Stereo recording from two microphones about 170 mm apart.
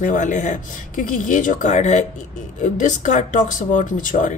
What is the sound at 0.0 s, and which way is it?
Speech, 50° left (ahead or behind).